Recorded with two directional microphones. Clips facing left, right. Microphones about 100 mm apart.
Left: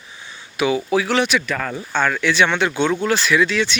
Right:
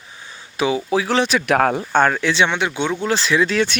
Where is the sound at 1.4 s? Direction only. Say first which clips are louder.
Right 8 dB; 65° right (ahead or behind).